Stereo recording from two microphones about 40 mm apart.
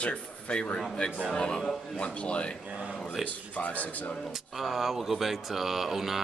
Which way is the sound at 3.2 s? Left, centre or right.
Left.